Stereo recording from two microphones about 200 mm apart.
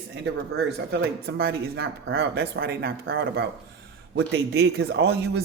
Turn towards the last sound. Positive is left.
turn(degrees=-55)  # may be behind; listen again after turning